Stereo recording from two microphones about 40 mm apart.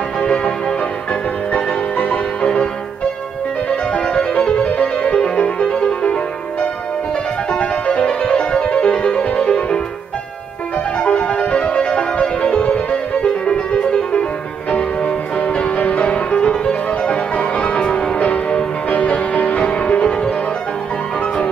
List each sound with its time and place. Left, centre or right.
0.2 s music: left
3.9 s music: left
7.5 s music: left
11.0 s music: left
15.4 s music: left